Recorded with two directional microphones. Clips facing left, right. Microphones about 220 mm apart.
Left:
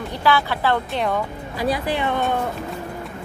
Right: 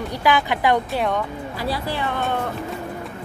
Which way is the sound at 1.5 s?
15° left (ahead or behind).